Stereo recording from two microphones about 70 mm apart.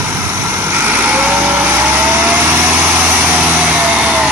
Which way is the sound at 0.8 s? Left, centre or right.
Right.